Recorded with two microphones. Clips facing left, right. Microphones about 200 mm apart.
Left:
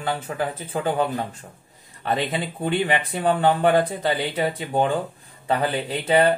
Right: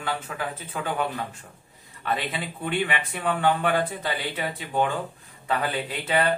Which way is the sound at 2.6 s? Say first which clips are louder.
Left 4 dB; 30° left (ahead or behind).